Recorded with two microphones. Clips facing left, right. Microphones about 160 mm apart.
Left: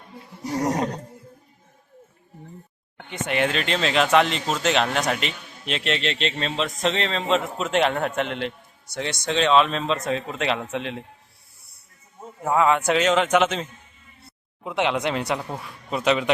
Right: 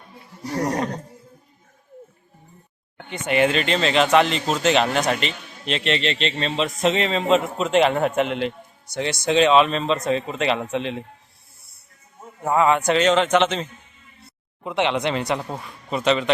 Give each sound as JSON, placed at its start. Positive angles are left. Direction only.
{"t": 0.4, "sound": "roaring cats", "side_deg": 20}
{"t": 3.2, "sound": "speech", "side_deg": 0}
{"t": 12.4, "sound": "speech", "side_deg": 0}